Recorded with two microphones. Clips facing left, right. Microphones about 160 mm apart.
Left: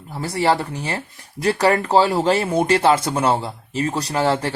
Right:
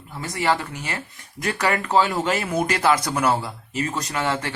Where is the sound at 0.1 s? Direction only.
35° left (ahead or behind).